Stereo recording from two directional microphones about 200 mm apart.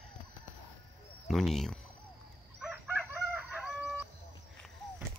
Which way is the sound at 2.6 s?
5° right (ahead or behind).